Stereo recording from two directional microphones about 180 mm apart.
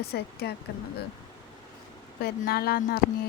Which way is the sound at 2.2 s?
60° left (ahead or behind).